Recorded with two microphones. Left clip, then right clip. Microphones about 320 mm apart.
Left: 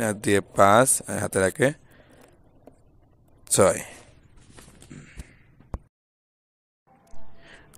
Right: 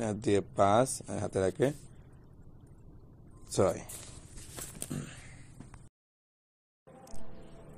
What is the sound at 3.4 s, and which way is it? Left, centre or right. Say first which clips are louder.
Speech: left 10 dB; left.